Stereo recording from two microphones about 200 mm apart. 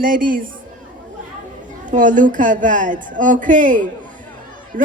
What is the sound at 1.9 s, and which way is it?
Speech, 40° right (ahead or behind).